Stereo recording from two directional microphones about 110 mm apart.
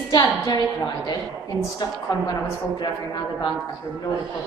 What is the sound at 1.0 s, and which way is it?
A woman's voice, 40° left (ahead or behind).